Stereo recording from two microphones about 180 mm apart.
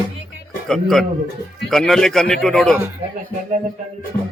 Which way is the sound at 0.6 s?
Centre (ahead or behind).